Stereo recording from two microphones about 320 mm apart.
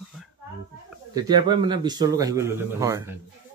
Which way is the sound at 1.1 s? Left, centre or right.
Centre.